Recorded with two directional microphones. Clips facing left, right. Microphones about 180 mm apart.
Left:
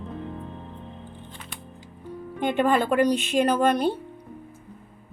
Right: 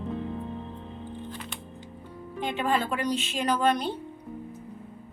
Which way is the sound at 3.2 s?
55° left (ahead or behind).